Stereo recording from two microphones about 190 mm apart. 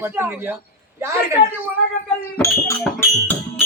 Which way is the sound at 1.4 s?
70° left (ahead or behind).